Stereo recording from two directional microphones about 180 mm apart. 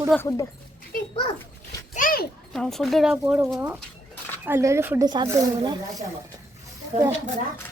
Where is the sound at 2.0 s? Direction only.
50° left (ahead or behind).